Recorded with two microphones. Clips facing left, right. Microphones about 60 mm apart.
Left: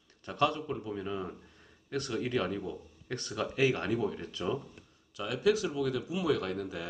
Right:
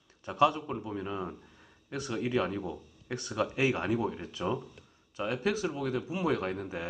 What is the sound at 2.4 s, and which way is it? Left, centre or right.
Speech, right.